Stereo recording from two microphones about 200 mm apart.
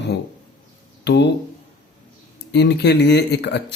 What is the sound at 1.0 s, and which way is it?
Speech, 55° left (ahead or behind).